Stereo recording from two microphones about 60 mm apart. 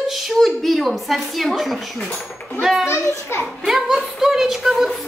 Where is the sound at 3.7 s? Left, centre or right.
Centre.